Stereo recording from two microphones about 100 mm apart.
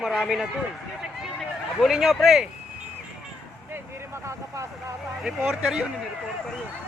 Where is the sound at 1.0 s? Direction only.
5° right (ahead or behind).